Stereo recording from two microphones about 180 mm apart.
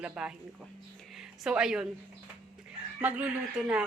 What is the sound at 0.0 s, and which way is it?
Speech, 5° right (ahead or behind).